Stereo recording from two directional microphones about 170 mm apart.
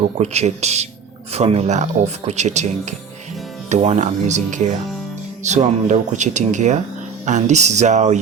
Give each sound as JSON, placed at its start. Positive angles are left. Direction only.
{"t": 0.2, "sound": "speech", "side_deg": -40}